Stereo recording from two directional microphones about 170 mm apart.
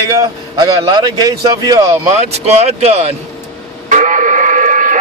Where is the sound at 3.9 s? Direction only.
50° right (ahead or behind).